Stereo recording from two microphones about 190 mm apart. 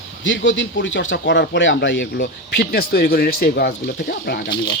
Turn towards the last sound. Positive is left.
turn(degrees=55)  # may be behind; listen again after turning